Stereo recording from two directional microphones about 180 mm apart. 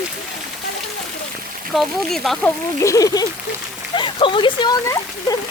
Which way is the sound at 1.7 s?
Centre (ahead or behind).